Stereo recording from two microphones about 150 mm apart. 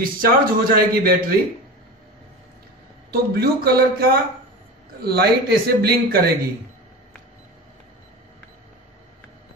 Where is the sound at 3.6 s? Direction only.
90° right.